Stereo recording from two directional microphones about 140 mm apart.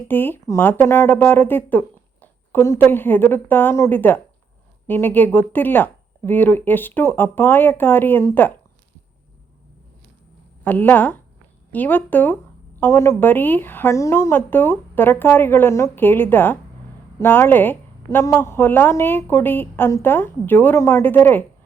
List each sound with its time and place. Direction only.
0.1 s a woman's voice: 15° left (ahead or behind)
10.6 s a woman's voice: 15° left (ahead or behind)